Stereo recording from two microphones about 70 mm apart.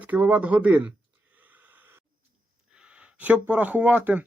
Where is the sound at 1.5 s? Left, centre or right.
Right.